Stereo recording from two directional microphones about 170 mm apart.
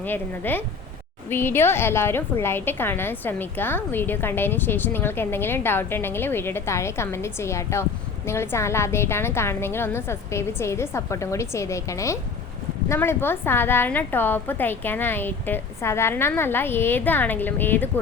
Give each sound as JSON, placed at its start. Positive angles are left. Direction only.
{"t": 0.0, "sound": "a woman's voice", "side_deg": 10}